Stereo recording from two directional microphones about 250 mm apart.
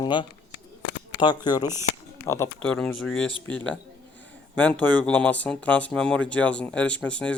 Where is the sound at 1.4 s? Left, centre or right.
Centre.